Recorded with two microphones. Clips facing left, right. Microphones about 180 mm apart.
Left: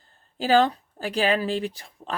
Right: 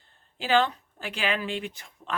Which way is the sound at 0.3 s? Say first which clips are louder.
Left 4 dB; 40° left (ahead or behind).